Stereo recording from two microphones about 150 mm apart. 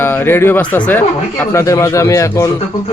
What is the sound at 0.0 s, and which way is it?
Speech, 15° left (ahead or behind).